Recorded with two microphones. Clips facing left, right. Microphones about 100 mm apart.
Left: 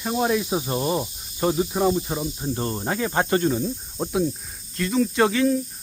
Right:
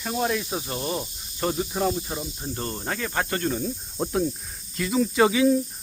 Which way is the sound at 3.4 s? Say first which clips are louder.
Left 4 dB; 10° left (ahead or behind).